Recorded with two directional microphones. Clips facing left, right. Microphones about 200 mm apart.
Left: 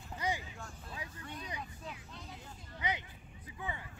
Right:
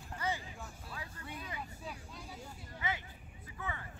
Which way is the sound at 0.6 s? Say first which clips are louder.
Even; 5° right (ahead or behind).